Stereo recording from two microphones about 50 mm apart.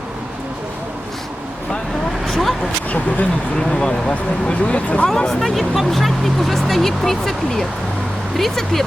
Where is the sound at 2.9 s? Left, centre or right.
Left.